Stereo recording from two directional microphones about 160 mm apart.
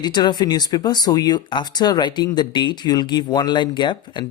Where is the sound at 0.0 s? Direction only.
25° left (ahead or behind).